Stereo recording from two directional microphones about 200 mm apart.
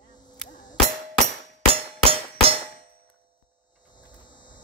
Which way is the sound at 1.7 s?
30° right (ahead or behind).